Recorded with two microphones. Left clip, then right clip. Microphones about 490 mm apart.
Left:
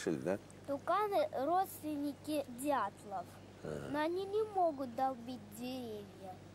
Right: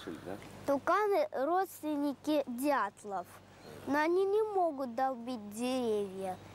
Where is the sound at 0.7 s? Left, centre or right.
Right.